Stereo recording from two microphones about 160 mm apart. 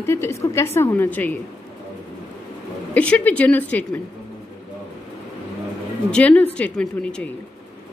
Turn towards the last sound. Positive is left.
turn(degrees=5)  # may be behind; listen again after turning